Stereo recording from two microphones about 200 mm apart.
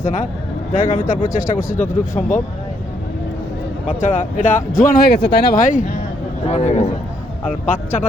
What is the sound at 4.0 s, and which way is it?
A man's voice, 40° left (ahead or behind).